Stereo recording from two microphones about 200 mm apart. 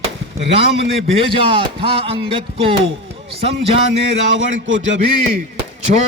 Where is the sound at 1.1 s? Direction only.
25° right (ahead or behind).